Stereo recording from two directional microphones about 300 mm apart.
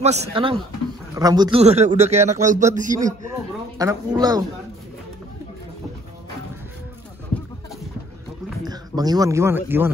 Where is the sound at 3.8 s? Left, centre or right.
Centre.